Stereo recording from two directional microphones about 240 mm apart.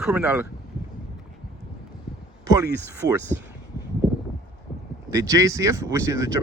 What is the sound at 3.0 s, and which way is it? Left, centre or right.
Speech, right.